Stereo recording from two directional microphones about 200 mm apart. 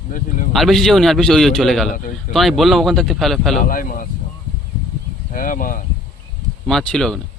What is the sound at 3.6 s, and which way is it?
Speech, 45° left (ahead or behind).